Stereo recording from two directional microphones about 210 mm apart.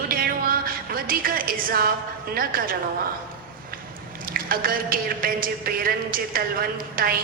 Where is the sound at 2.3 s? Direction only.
45° right (ahead or behind).